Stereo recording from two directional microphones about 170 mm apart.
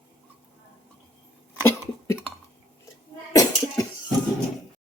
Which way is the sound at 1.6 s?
15° left (ahead or behind).